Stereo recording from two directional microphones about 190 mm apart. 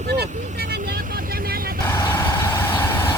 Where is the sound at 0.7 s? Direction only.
55° right (ahead or behind).